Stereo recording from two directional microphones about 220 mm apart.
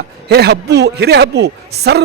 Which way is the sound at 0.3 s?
45° right (ahead or behind).